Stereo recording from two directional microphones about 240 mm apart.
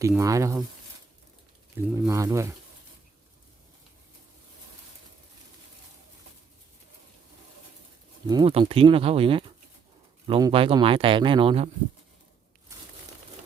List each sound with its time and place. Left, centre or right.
0.0 s speech: centre
1.7 s speech: centre
8.3 s speech: right